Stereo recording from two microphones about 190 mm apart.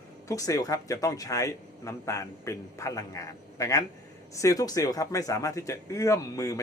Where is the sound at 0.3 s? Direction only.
20° left (ahead or behind).